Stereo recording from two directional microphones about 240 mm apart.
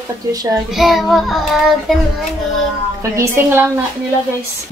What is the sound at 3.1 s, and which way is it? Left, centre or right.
Speech, centre.